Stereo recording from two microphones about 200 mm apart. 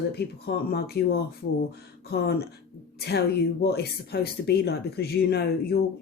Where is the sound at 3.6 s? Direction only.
55° left (ahead or behind).